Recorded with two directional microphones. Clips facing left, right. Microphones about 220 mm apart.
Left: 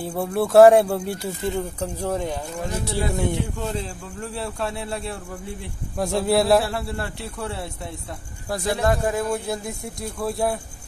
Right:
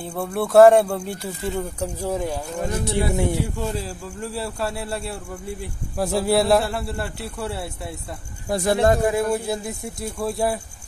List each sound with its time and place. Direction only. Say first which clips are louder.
0.0 s speech: left 2 dB; centre (ahead or behind)
2.9 s speech: right 3 dB; 15° right (ahead or behind)
3.3 s speech: right 1 dB; centre (ahead or behind)
8.5 s speech: right 4 dB; 25° right (ahead or behind)
9.0 s speech: right 3 dB; 10° right (ahead or behind)